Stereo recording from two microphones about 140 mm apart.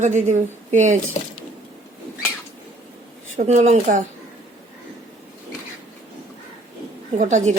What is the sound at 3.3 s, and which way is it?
Speech, 60° right (ahead or behind).